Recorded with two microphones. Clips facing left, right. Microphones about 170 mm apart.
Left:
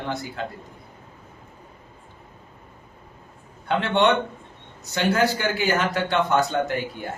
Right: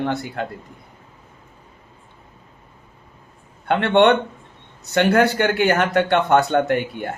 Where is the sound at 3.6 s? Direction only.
60° right (ahead or behind).